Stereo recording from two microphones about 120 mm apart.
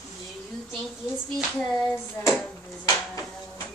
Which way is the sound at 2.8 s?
30° left (ahead or behind).